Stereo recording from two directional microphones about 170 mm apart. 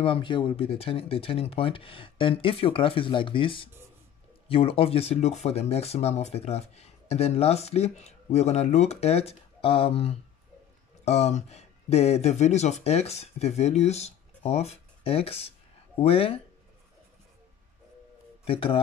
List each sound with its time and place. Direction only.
0.0 s speech: 30° left (ahead or behind)
18.4 s speech: 30° left (ahead or behind)